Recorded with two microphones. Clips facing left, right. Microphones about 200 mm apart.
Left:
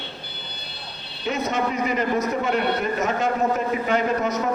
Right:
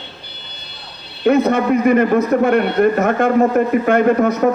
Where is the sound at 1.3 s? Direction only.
55° right (ahead or behind).